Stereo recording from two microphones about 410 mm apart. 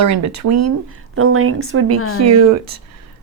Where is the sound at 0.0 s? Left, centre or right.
Right.